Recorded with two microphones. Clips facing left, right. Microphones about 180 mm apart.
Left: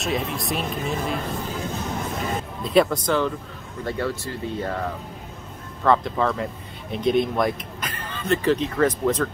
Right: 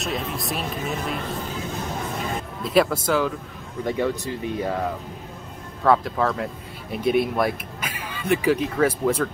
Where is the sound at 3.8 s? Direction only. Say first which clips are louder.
Right 3 dB; 15° right (ahead or behind).